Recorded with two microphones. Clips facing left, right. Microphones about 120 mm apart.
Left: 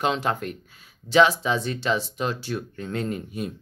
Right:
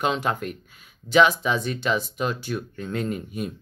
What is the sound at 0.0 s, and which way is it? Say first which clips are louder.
Speech: even; 30° left (ahead or behind).